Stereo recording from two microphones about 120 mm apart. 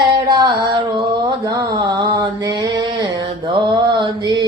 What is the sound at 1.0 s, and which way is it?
Mantra, 30° right (ahead or behind).